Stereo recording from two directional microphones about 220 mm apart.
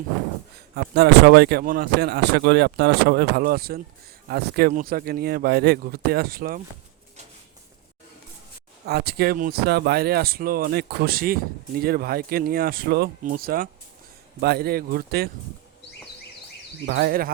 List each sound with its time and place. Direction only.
0.5 s speech: 45° right (ahead or behind)
8.9 s speech: 45° right (ahead or behind)
16.8 s speech: 45° right (ahead or behind)